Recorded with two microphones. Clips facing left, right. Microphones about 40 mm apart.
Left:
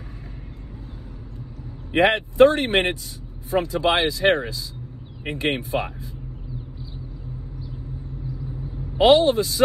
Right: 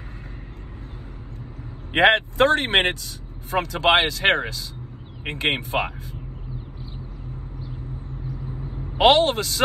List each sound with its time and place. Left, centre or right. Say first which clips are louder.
1.9 s speech: right 2 dB; right
8.9 s speech: left 1 dB; right